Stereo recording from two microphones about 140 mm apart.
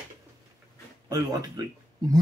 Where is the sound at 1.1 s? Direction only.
30° right (ahead or behind).